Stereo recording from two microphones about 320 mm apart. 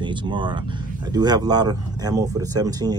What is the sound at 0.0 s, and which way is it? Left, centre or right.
Speech, centre.